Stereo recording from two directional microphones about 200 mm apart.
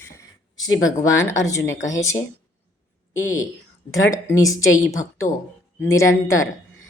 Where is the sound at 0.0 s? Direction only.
15° left (ahead or behind).